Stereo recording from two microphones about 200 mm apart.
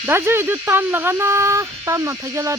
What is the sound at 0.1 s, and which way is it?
Speech, 10° right (ahead or behind).